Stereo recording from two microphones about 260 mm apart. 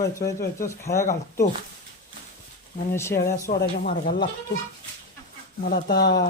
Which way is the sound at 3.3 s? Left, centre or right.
Left.